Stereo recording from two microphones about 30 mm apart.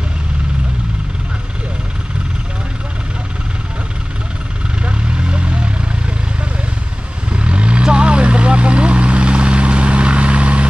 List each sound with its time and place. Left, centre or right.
4.8 s vehicle: right
7.3 s vehicle: right